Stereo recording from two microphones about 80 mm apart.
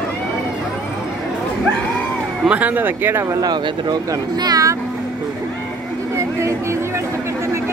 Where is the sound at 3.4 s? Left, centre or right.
Right.